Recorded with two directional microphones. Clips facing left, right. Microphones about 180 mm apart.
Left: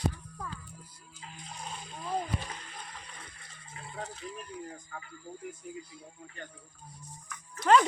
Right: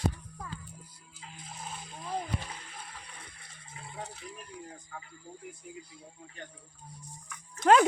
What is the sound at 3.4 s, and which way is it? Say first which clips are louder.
Rattle: left 1 dB; 10° right (ahead or behind).